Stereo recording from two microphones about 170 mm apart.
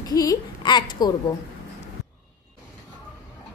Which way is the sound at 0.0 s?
20° left (ahead or behind).